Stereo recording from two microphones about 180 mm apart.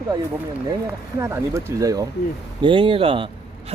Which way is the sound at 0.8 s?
15° right (ahead or behind).